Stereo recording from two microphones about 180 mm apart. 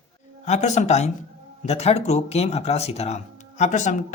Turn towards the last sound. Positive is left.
turn(degrees=40)  # may be behind; listen again after turning